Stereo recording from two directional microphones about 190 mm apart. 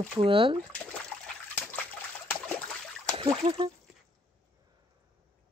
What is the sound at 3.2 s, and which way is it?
Speech, 25° right (ahead or behind).